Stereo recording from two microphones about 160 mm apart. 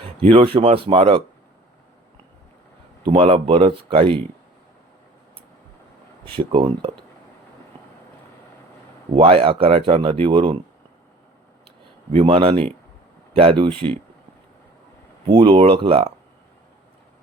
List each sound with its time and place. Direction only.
0.0 s speech: 35° right (ahead or behind)
3.1 s speech: 35° right (ahead or behind)
6.2 s speech: 35° right (ahead or behind)
9.1 s speech: 35° right (ahead or behind)
12.1 s speech: 35° right (ahead or behind)
15.3 s speech: 30° right (ahead or behind)